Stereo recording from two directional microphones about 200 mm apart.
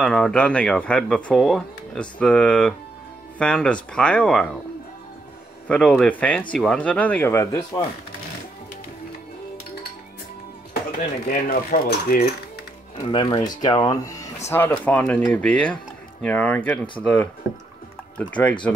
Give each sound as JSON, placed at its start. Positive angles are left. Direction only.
{"t": 0.0, "sound": "speech", "side_deg": 5}
{"t": 5.7, "sound": "speech", "side_deg": 5}
{"t": 11.2, "sound": "cutlery", "side_deg": 45}
{"t": 13.0, "sound": "speech", "side_deg": 25}